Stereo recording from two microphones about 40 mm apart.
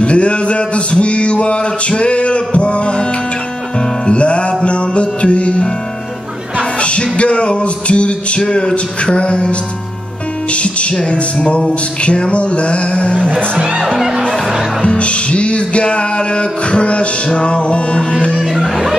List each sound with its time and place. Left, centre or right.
0.0 s a sound: left
4.0 s music: left
6.8 s music: left
13.6 s speech: right
13.9 s music: centre
15.0 s music: left
18.4 s music: centre